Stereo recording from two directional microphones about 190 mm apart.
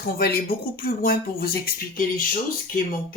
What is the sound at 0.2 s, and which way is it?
Speech, 50° left (ahead or behind).